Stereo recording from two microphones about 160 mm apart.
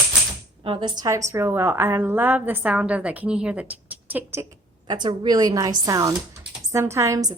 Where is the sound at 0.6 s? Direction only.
30° right (ahead or behind); by 4.4 s 10° right (ahead or behind).